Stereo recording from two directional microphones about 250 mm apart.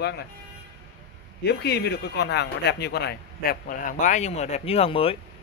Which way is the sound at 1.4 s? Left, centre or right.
Left.